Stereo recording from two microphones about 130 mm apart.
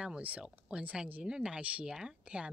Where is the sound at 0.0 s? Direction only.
10° right (ahead or behind).